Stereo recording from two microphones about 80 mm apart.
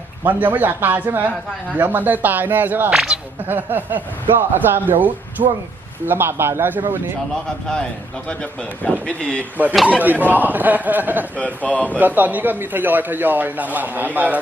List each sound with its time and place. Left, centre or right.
0.3 s a man's voice: right
2.9 s speech: centre
3.4 s a man's voice: right
8.3 s speech: centre
9.8 s a man's voice: centre
11.3 s speech: centre
11.9 s a man's voice: right